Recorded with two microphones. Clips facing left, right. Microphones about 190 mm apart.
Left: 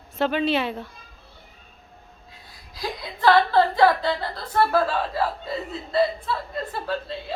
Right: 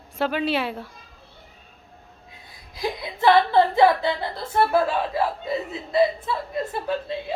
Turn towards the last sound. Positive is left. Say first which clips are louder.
# right 2 dB
turn(degrees=-15)  # may be behind; listen again after turning